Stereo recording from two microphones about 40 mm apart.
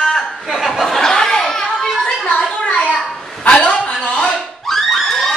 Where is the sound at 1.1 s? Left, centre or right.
Centre.